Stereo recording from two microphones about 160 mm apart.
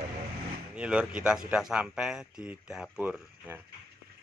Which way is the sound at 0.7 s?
5° right (ahead or behind).